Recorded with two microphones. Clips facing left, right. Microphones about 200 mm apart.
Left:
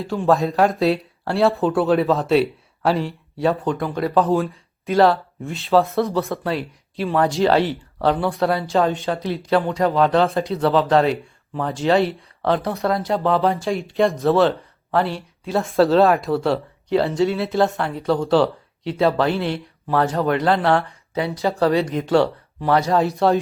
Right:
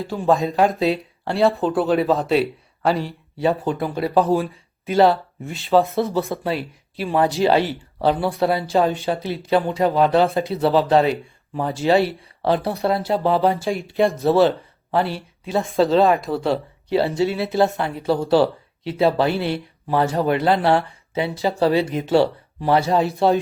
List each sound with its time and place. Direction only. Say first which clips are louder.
0.0 s speech: left 1 dB; centre (ahead or behind)
21.4 s speech: even; 25° right (ahead or behind)